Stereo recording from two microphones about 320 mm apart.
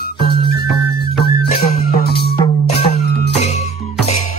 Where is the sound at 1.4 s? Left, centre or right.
Left.